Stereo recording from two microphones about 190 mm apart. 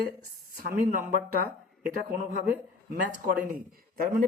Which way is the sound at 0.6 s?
45° right (ahead or behind).